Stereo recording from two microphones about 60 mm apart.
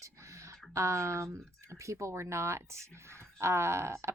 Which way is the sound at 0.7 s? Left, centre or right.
Right.